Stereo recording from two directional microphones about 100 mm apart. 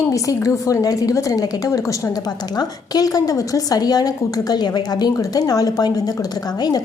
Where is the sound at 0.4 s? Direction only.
35° left (ahead or behind).